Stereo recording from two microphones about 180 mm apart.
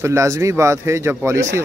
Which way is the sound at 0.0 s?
15° right (ahead or behind).